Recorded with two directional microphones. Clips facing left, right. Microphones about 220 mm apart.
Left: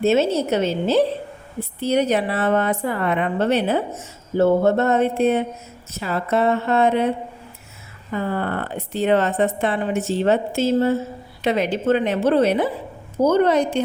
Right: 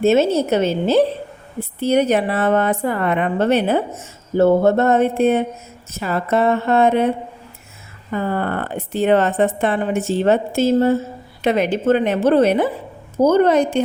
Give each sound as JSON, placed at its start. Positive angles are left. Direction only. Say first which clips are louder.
{"t": 0.0, "sound": "speech", "louder": "right 3 dB", "side_deg": -50}
{"t": 8.1, "sound": "speech", "louder": "right 2 dB", "side_deg": -50}